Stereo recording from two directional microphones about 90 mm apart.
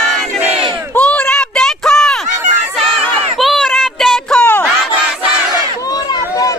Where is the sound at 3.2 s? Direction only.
Centre (ahead or behind).